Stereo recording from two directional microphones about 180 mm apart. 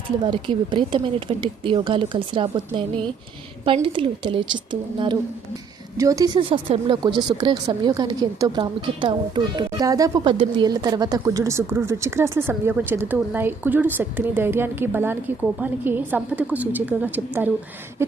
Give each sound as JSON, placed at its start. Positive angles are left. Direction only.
{"t": 0.3, "sound": "a woman's voice", "side_deg": -25}